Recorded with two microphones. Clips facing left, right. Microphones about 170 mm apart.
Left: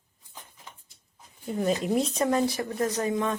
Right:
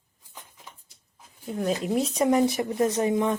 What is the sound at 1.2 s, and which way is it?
Speech, centre (ahead or behind).